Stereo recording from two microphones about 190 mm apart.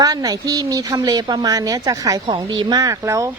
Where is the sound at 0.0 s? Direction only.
20° right (ahead or behind).